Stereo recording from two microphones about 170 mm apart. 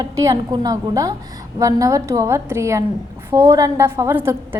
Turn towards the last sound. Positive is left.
turn(degrees=-15)  # may be behind; listen again after turning